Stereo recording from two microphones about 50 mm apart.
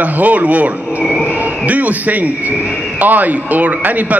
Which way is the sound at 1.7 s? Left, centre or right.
Right.